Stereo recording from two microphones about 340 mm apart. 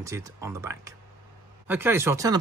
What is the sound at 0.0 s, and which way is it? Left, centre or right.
Speech, centre.